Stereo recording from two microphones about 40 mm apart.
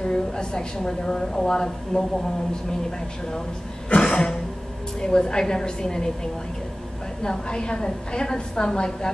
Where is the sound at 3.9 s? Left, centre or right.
Left.